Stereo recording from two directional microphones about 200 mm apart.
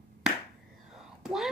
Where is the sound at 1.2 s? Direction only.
Centre (ahead or behind).